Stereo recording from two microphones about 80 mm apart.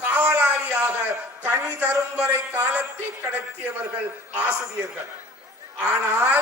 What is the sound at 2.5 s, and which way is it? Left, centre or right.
Speech, right.